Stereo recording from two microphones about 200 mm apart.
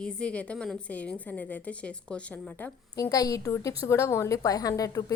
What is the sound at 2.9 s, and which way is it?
A woman's voice, 15° left (ahead or behind).